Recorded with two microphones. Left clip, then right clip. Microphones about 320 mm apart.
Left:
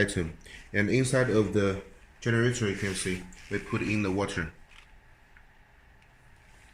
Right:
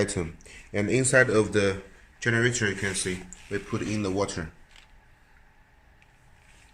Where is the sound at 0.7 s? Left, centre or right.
Right.